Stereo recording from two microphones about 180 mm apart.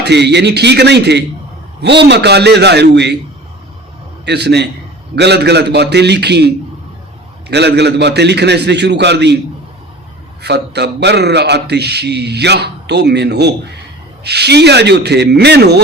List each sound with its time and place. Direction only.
0.0 s a man's voice: 70° right (ahead or behind)
4.3 s a man's voice: 65° right (ahead or behind)
10.4 s a man's voice: 70° right (ahead or behind)